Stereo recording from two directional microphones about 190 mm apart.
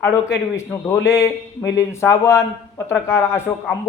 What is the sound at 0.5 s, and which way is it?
A man's voice, 15° left (ahead or behind).